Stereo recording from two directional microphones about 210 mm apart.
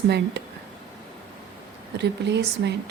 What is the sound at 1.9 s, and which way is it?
Speech, 55° right (ahead or behind).